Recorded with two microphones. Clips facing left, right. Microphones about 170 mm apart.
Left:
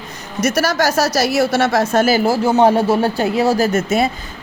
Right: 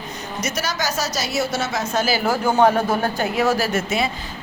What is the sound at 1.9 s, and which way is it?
Speech, 50° left (ahead or behind).